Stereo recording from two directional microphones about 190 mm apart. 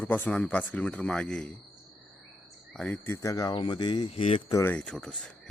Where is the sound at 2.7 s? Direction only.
5° left (ahead or behind); by 4.4 s 30° left (ahead or behind).